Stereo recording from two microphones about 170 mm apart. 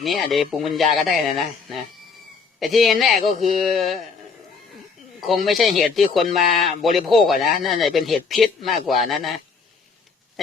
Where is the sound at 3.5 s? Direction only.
Centre (ahead or behind).